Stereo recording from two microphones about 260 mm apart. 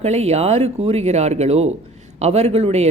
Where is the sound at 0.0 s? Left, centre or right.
Right.